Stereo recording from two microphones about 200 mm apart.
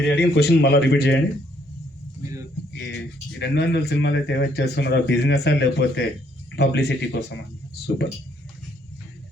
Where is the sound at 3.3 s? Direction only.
60° left (ahead or behind).